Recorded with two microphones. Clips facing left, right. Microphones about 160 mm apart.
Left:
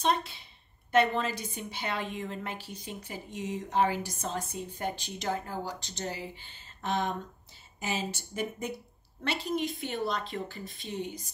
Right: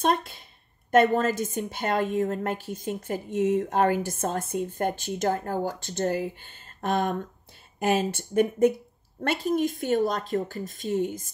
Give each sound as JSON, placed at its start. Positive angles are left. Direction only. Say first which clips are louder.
{"t": 0.0, "sound": "a woman's voice", "louder": "right 4 dB", "side_deg": -50}